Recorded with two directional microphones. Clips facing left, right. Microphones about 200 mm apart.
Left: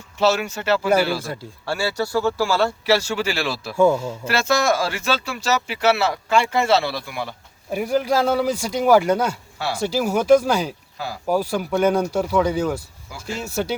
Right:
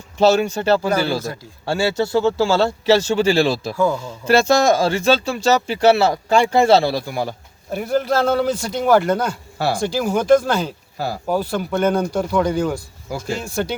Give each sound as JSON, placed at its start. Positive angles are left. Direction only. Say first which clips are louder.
{"t": 0.2, "sound": "speech", "louder": "right 5 dB", "side_deg": -30}
{"t": 7.7, "sound": "speech", "louder": "right 1 dB", "side_deg": 10}
{"t": 10.9, "sound": "speech", "louder": "right 6 dB", "side_deg": -40}
{"t": 11.3, "sound": "speech", "louder": "left 1 dB", "side_deg": 10}
{"t": 13.1, "sound": "speech", "louder": "right 6 dB", "side_deg": -40}
{"t": 13.4, "sound": "speech", "louder": "right 1 dB", "side_deg": 5}